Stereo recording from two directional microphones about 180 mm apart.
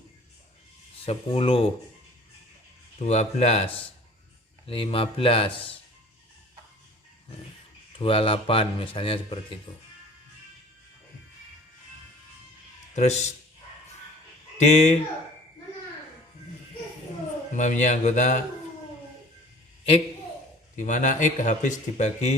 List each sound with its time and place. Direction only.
1.0 s speech: 35° left (ahead or behind)
3.0 s speech: 40° left (ahead or behind)
7.9 s speech: 30° left (ahead or behind)
13.0 s speech: 40° left (ahead or behind)
14.6 s speech: 40° left (ahead or behind)
17.5 s speech: 45° left (ahead or behind)
20.7 s speech: 45° left (ahead or behind)